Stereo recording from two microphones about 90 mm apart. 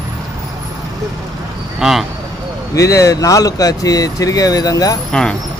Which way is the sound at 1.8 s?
5° right (ahead or behind).